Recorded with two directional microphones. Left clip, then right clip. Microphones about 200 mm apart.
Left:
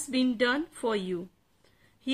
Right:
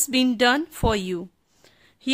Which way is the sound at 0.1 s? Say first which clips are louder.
Right 7 dB; 55° right (ahead or behind).